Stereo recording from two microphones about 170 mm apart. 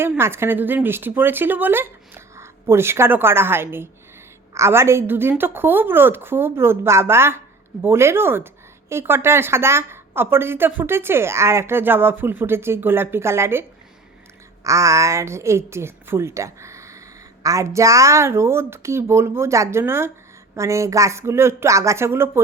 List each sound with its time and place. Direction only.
0.0 s a woman's voice: 15° right (ahead or behind)